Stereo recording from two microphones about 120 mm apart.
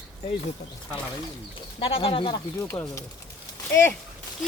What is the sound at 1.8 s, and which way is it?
Speech, 50° left (ahead or behind).